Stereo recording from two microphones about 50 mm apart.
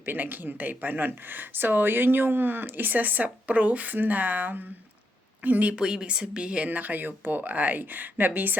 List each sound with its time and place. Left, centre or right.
0.0 s speech: right
5.7 s speech: right
6.7 s speech: right